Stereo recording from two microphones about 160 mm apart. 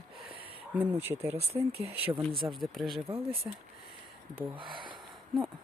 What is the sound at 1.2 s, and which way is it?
Speech, 40° right (ahead or behind).